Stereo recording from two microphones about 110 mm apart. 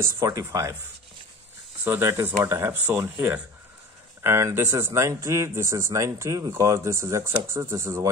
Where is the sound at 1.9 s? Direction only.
25° right (ahead or behind).